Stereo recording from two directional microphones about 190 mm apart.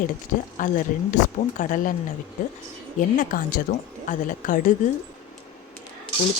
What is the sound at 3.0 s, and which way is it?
A woman's voice, 40° left (ahead or behind).